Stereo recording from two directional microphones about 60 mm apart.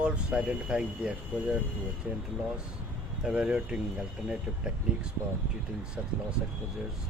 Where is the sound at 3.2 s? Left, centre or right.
Centre.